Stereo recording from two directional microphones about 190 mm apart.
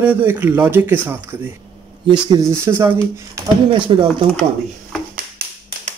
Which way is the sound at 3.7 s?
25° right (ahead or behind).